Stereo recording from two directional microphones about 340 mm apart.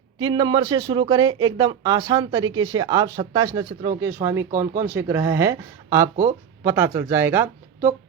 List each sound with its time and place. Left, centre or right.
0.2 s speech: centre
6.1 s speech: right
6.7 s speech: centre